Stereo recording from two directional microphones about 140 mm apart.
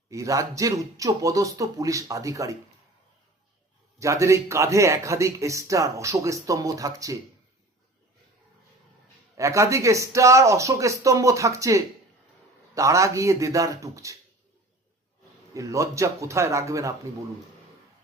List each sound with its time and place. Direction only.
0.1 s speech: 25° right (ahead or behind)
4.0 s speech: 20° right (ahead or behind)
9.4 s speech: 20° right (ahead or behind)
15.5 s speech: 20° right (ahead or behind)